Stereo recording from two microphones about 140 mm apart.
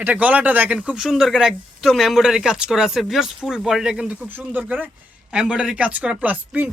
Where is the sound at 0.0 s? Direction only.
10° right (ahead or behind).